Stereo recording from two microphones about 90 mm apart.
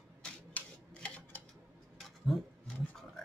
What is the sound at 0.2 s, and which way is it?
Camera, 15° left (ahead or behind).